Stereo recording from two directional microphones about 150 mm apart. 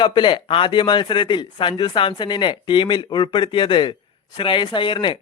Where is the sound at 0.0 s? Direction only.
30° left (ahead or behind).